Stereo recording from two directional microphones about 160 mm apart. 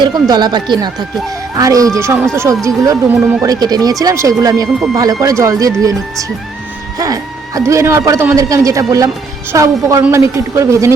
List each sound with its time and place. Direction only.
0.0 s a man's voice: 25° right (ahead or behind)